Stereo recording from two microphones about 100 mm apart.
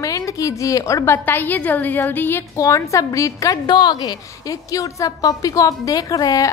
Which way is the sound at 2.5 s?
30° left (ahead or behind).